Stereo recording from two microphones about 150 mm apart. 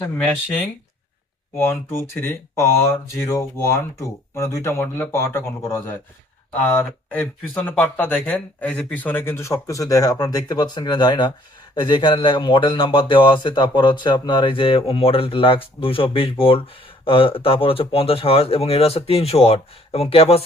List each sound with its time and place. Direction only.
1.5 s speech: 15° left (ahead or behind); by 20.4 s 40° left (ahead or behind)